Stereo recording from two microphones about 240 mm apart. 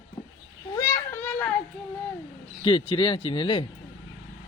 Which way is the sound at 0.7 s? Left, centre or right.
Centre.